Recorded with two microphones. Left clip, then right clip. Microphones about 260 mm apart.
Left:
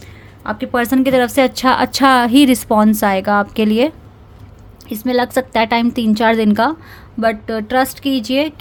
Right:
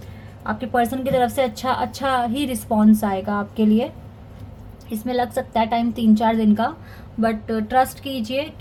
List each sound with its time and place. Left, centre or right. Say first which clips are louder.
0.4 s a woman's voice: left 3 dB; left
1.1 s a woman's voice: left 5 dB; left
1.9 s a woman's voice: left 10 dB; left
4.9 s a woman's voice: left 6 dB; left